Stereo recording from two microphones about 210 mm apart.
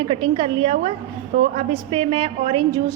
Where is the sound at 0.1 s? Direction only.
25° right (ahead or behind).